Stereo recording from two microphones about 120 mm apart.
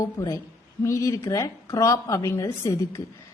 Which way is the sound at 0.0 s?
25° left (ahead or behind).